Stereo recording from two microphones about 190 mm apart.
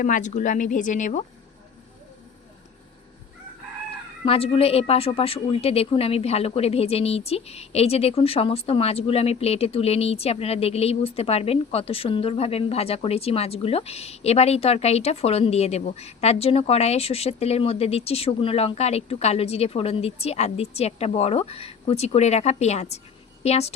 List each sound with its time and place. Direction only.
0.0 s a woman's voice: 45° left (ahead or behind)
4.3 s a woman's voice: 30° left (ahead or behind)